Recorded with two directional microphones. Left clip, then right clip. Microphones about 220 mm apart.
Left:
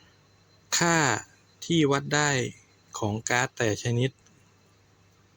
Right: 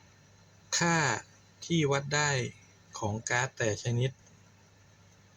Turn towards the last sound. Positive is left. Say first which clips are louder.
# left 5 dB
turn(degrees=35)  # may be behind; listen again after turning